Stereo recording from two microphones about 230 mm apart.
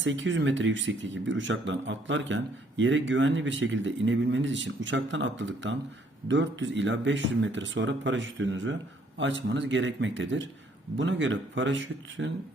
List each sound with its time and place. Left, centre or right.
0.0 s speech: right